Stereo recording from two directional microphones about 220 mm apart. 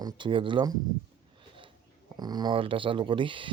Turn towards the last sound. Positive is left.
turn(degrees=-20)  # may be behind; listen again after turning